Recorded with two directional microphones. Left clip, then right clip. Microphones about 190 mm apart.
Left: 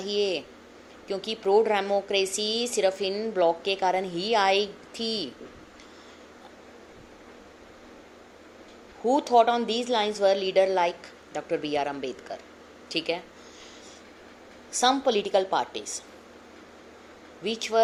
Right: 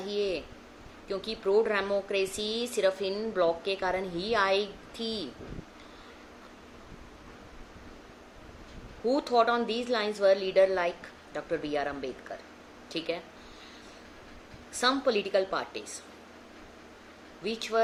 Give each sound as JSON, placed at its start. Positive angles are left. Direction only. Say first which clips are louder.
{"t": 0.0, "sound": "a woman's voice", "louder": "left 4 dB", "side_deg": 20}
{"t": 9.1, "sound": "a woman's voice", "louder": "left 5 dB", "side_deg": 15}
{"t": 14.7, "sound": "a woman's voice", "louder": "left 4 dB", "side_deg": 20}
{"t": 17.4, "sound": "speech", "louder": "left 4 dB", "side_deg": 15}